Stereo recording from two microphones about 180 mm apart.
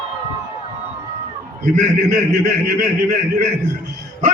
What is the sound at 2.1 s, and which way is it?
A man's voice, 55° right (ahead or behind).